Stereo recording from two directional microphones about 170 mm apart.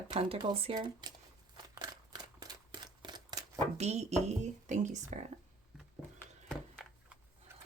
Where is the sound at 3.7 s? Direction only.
40° right (ahead or behind).